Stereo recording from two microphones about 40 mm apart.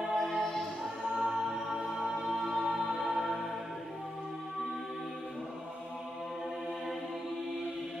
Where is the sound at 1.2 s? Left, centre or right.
Centre.